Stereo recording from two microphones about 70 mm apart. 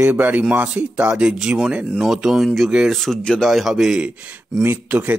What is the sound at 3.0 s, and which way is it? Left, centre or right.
Speech, centre.